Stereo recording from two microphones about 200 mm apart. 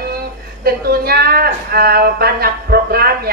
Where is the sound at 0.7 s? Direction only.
50° right (ahead or behind).